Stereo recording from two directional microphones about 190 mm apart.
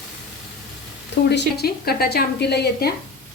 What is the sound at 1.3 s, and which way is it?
A woman's voice, 55° left (ahead or behind).